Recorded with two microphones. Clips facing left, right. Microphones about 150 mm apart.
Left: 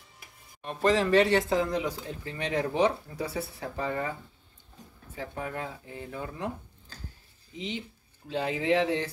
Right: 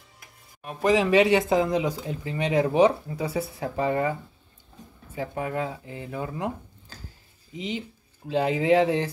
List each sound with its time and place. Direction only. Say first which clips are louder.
0.6 s speech: right 3 dB; 5° right (ahead or behind)
6.2 s a sound: right 5 dB; 10° right (ahead or behind)
7.5 s speech: right 4 dB; 10° right (ahead or behind)